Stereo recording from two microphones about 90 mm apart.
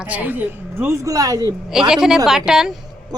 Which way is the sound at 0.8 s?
35° right (ahead or behind).